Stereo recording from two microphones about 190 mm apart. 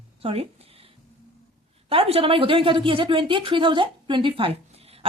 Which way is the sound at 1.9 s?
30° right (ahead or behind).